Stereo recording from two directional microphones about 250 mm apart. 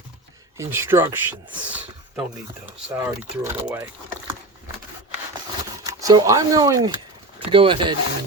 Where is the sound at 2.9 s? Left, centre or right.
Centre.